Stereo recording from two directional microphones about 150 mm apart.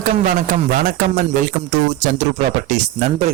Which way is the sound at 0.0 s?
60° right (ahead or behind).